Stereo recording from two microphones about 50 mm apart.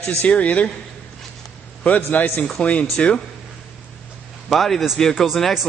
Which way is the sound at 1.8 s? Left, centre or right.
Left.